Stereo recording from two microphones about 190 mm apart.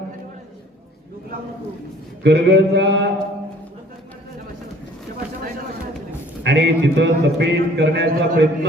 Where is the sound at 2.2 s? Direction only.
60° right (ahead or behind).